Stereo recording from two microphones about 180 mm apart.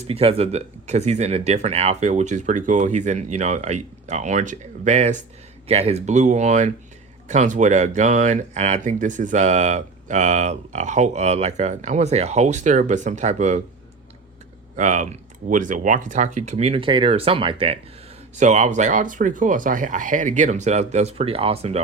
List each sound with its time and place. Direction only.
0.0 s speech: 35° right (ahead or behind)
14.8 s speech: 40° right (ahead or behind)
18.3 s speech: 40° right (ahead or behind)